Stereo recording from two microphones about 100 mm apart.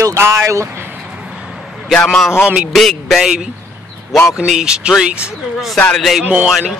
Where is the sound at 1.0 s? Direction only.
10° right (ahead or behind).